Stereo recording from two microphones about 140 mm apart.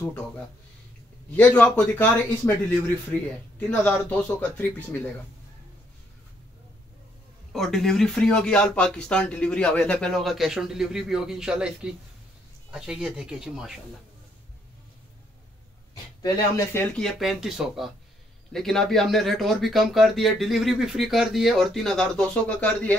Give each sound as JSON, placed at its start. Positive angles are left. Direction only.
{"t": 1.3, "sound": "speech", "side_deg": 10}
{"t": 3.5, "sound": "speech", "side_deg": 10}
{"t": 7.5, "sound": "speech", "side_deg": 0}
{"t": 16.2, "sound": "speech", "side_deg": 25}
{"t": 16.9, "sound": "speech", "side_deg": 0}